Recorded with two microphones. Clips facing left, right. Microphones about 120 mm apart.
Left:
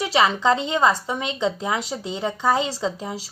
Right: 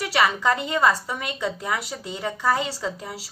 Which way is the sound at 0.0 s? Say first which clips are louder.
Left 2 dB; 25° left (ahead or behind).